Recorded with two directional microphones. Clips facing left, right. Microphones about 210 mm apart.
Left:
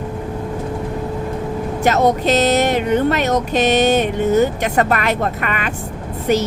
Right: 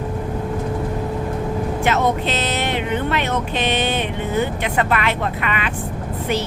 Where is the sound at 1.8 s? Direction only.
40° left (ahead or behind).